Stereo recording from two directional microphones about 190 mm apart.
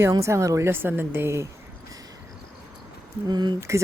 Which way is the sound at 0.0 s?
15° right (ahead or behind).